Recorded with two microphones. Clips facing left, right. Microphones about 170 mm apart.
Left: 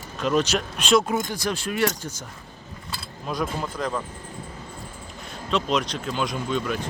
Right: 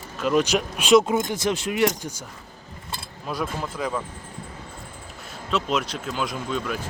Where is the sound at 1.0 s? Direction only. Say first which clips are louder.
Right 3 dB; 20° right (ahead or behind).